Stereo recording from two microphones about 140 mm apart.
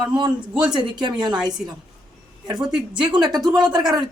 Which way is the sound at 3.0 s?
30° right (ahead or behind).